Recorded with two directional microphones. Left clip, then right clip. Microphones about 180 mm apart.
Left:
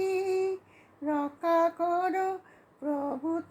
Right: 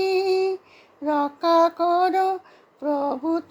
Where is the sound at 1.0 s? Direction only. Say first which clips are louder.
Right 8 dB; 35° right (ahead or behind).